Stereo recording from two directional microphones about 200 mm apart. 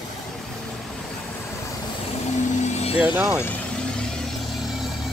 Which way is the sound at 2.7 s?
30° left (ahead or behind).